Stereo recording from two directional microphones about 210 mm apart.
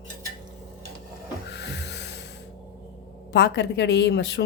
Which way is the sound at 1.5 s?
55° left (ahead or behind).